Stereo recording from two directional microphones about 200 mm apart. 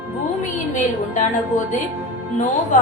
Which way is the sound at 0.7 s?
40° left (ahead or behind).